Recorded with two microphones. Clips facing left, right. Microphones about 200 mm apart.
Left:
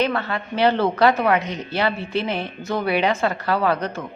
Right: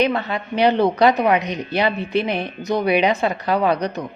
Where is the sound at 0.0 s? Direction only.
20° right (ahead or behind).